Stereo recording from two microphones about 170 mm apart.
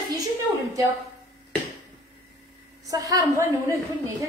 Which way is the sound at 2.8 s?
20° right (ahead or behind).